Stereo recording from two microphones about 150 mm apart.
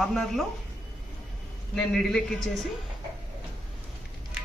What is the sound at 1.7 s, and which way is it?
Speech, 5° left (ahead or behind).